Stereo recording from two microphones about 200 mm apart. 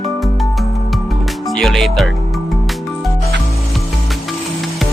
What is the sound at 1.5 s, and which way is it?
Speech, centre (ahead or behind).